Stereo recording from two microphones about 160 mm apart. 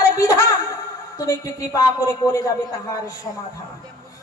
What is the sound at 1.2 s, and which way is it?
A man's voice, 20° left (ahead or behind).